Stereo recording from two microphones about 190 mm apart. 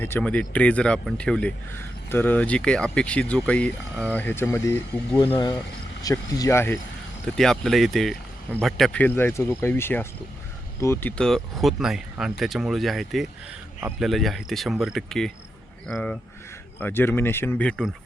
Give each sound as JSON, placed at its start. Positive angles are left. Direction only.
{"t": 0.0, "sound": "speech", "side_deg": 10}
{"t": 7.3, "sound": "speech", "side_deg": 0}